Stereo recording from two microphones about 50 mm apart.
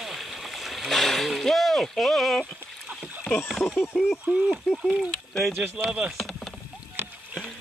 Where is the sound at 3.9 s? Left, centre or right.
Centre.